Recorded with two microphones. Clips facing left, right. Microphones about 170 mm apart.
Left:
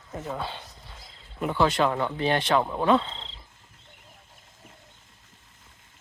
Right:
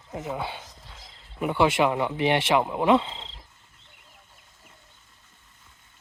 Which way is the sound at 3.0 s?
5° right (ahead or behind).